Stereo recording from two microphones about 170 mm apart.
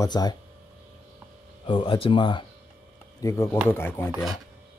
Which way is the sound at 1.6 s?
30° left (ahead or behind).